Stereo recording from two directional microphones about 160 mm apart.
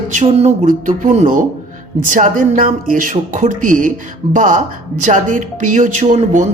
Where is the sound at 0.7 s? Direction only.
55° right (ahead or behind).